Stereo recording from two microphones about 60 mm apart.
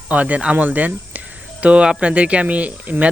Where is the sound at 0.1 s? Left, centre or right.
Right.